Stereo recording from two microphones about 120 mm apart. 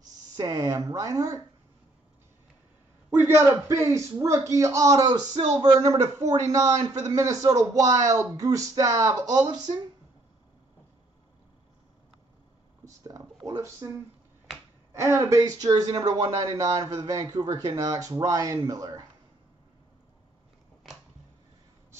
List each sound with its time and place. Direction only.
0.4 s speech: 25° right (ahead or behind)
3.1 s speech: 20° right (ahead or behind); by 9.8 s 35° right (ahead or behind)
12.8 s a sound: 25° right (ahead or behind)
14.9 s speech: 25° right (ahead or behind)